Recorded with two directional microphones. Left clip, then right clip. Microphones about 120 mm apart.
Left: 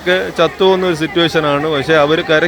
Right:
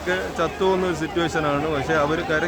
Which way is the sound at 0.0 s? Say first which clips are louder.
Left 10 dB; 45° left (ahead or behind).